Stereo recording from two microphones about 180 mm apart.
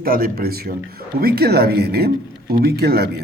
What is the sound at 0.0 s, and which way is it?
Speech, 55° right (ahead or behind).